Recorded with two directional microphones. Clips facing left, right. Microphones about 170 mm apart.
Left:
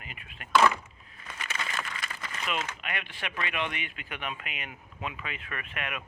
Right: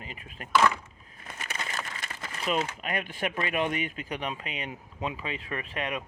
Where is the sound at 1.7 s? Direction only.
25° right (ahead or behind); by 3.3 s 45° right (ahead or behind).